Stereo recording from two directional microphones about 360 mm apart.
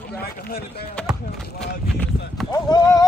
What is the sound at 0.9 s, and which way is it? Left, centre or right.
Speech, centre.